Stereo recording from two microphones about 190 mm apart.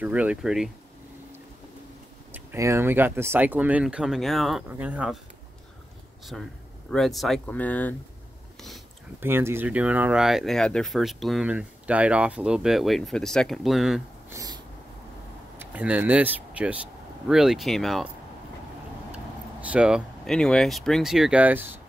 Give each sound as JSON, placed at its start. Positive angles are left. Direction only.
{"t": 0.0, "sound": "speech", "side_deg": -10}
{"t": 2.3, "sound": "speech", "side_deg": -15}
{"t": 6.3, "sound": "speech", "side_deg": 0}
{"t": 9.2, "sound": "speech", "side_deg": -10}
{"t": 14.3, "sound": "cat", "side_deg": -20}
{"t": 15.6, "sound": "speech", "side_deg": -10}
{"t": 19.1, "sound": "speech", "side_deg": -5}